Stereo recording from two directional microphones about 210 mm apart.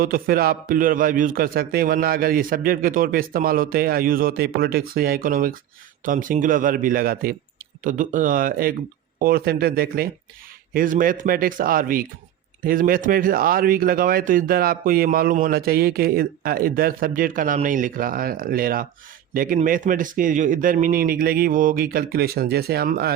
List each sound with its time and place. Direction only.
0.0 s speech: 45° right (ahead or behind)